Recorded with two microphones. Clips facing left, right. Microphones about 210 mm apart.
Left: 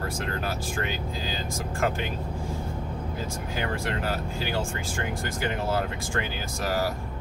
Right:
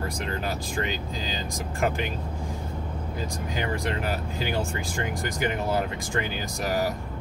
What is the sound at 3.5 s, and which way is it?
Speech, 15° right (ahead or behind).